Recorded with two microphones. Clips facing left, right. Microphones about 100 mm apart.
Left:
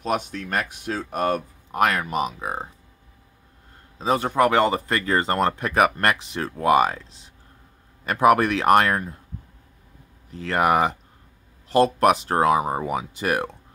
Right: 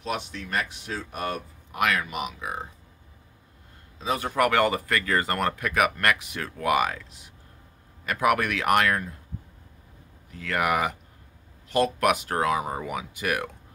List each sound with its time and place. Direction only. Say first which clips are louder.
0.0 s speech: left 6 dB; 45° left (ahead or behind)
4.0 s speech: left 5 dB; 35° left (ahead or behind)
10.3 s speech: left 5 dB; 30° left (ahead or behind)